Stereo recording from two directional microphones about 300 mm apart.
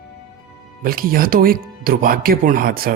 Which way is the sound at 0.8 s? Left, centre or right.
Right.